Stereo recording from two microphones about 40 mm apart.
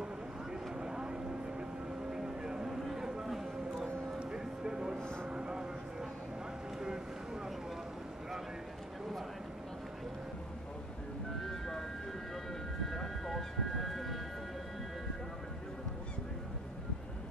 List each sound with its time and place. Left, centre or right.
0.5 s vehicle: centre
2.9 s a sound: centre
4.2 s music: centre
4.9 s vehicle: centre
5.3 s vehicle: centre
11.4 s music: centre
12.9 s a sound: centre